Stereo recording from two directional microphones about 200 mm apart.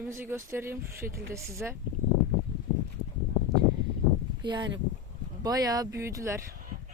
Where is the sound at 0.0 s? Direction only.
10° right (ahead or behind).